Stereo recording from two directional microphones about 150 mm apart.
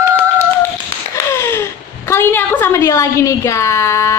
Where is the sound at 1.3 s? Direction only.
15° left (ahead or behind).